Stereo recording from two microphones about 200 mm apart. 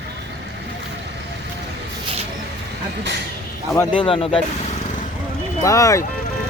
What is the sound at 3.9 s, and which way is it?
Speech, 25° left (ahead or behind).